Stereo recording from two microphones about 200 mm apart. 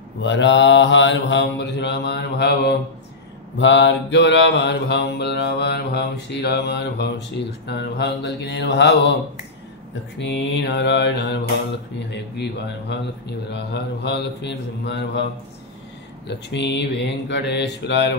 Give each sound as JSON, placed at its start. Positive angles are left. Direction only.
{"t": 0.2, "sound": "mantra", "side_deg": 65}
{"t": 3.5, "sound": "mantra", "side_deg": 65}
{"t": 10.1, "sound": "mantra", "side_deg": 60}
{"t": 12.9, "sound": "mantra", "side_deg": 60}
{"t": 16.3, "sound": "mantra", "side_deg": 60}